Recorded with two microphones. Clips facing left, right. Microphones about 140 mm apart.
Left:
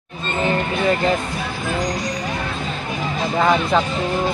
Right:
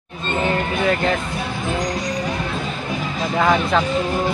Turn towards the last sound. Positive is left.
turn(degrees=5)  # may be behind; listen again after turning